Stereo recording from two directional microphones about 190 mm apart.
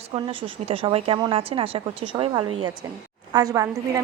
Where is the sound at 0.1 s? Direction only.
25° right (ahead or behind).